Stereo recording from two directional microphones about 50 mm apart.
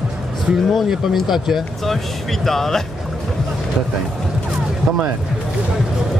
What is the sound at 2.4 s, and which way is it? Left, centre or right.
Speech, centre.